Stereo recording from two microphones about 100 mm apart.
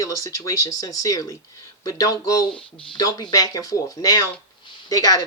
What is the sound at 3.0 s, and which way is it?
Speech, 40° left (ahead or behind).